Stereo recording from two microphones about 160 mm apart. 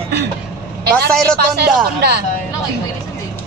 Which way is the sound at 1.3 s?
90° right.